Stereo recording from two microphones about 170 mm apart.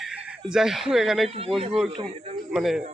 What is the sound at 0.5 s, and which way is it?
Speech, 5° right (ahead or behind).